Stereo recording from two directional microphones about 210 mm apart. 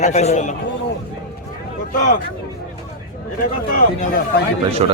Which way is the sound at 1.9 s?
35° left (ahead or behind).